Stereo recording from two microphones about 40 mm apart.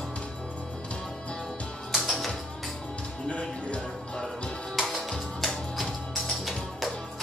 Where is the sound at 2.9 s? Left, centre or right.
Left.